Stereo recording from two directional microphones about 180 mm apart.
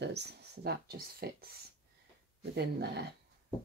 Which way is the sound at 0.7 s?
60° right (ahead or behind).